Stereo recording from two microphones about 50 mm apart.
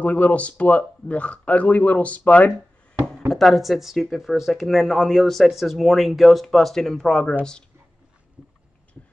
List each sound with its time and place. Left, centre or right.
0.0 s speech: left
3.3 s speech: centre
9.0 s a sound: centre